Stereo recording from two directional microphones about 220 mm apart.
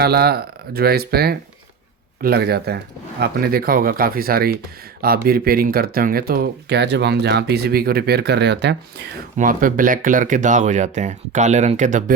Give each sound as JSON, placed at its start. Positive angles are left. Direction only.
{"t": 0.0, "sound": "speech", "side_deg": -45}